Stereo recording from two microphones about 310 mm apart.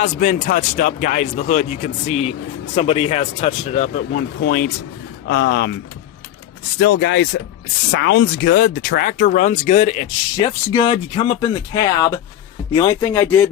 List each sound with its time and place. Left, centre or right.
0.0 s speech: left
7.0 s speech: left; by 13.5 s centre